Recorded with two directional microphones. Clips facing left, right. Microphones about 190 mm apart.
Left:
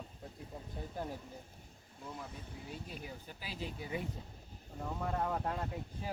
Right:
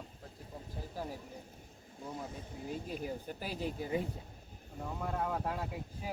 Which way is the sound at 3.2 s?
50° right (ahead or behind).